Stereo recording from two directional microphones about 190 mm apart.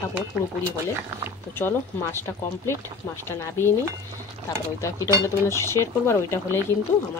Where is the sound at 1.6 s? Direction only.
10° left (ahead or behind).